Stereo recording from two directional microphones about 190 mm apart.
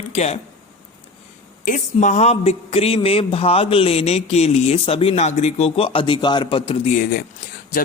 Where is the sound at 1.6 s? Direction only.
40° left (ahead or behind).